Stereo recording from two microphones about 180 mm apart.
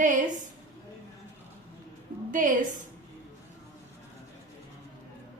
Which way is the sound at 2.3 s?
45° right (ahead or behind).